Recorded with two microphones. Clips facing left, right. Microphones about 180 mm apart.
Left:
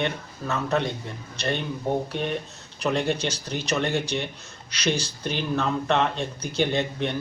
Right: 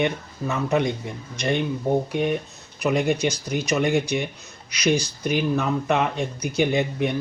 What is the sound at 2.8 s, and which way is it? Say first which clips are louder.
Speech: right 3 dB; 10° right (ahead or behind).